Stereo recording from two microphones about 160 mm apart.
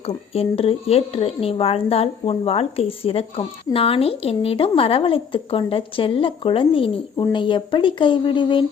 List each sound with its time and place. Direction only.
0.3 s a woman's voice: 35° left (ahead or behind)